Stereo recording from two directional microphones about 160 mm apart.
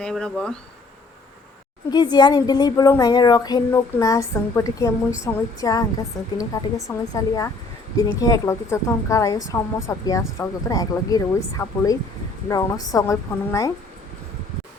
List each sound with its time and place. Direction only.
0.0 s speech: 5° left (ahead or behind)
1.9 s a woman's voice: 25° left (ahead or behind)